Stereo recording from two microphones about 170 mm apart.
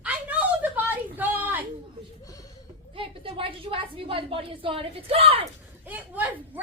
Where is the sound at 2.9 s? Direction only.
30° right (ahead or behind).